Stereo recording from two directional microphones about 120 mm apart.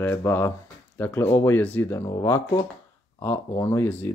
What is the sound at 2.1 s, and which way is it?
Speech, 30° left (ahead or behind).